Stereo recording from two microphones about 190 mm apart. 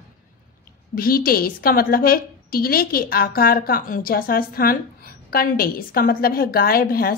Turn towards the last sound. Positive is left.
turn(degrees=50)  # may be behind; listen again after turning